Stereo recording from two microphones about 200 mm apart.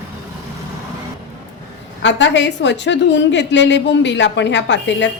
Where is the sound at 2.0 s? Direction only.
65° left (ahead or behind).